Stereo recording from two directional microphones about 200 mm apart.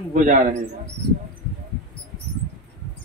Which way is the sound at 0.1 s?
40° right (ahead or behind).